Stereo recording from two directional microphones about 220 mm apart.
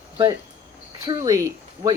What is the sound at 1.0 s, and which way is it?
Speech, 15° right (ahead or behind).